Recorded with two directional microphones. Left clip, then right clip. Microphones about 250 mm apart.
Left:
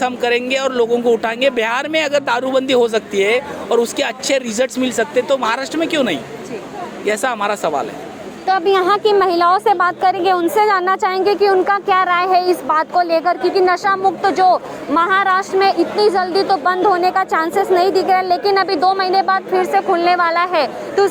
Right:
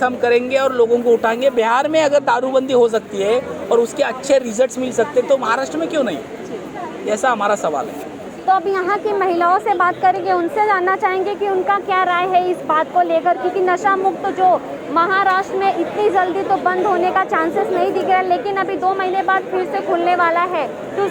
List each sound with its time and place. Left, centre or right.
0.0 s speech: left
8.7 s a woman's voice: left